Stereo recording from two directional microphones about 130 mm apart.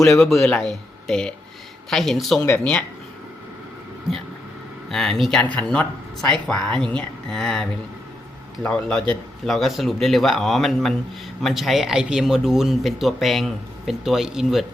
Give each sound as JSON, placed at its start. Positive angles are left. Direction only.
{"t": 0.2, "sound": "speech", "side_deg": 0}
{"t": 4.9, "sound": "speech", "side_deg": 5}